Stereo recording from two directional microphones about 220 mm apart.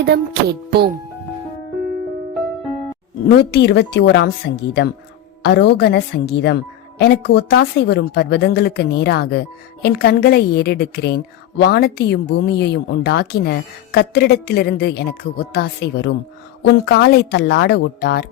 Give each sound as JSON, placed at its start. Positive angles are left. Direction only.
{"t": 0.7, "sound": "speech", "side_deg": -45}
{"t": 3.2, "sound": "a woman's voice", "side_deg": 50}